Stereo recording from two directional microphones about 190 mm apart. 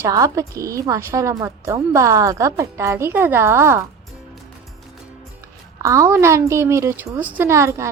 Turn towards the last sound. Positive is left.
turn(degrees=-15)  # may be behind; listen again after turning